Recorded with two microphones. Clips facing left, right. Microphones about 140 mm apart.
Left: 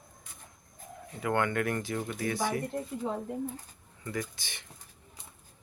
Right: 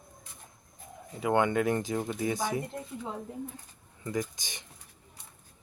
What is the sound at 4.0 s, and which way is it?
Speech, 20° right (ahead or behind).